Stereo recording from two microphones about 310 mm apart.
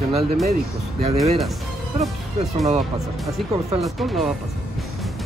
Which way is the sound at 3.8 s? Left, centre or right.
Centre.